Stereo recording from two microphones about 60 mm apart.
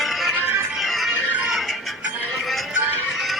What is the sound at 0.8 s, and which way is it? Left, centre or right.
Music, centre.